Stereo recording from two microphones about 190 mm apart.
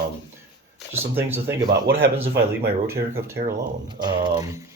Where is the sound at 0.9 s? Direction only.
10° right (ahead or behind).